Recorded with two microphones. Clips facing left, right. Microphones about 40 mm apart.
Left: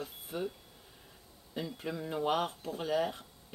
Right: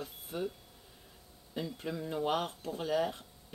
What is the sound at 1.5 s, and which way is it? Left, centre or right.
Speech, centre.